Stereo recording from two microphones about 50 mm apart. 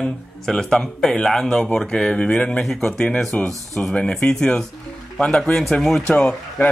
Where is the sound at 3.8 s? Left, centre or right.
Left.